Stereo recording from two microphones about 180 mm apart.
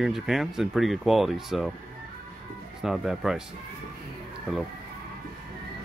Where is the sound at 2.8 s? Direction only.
Centre (ahead or behind).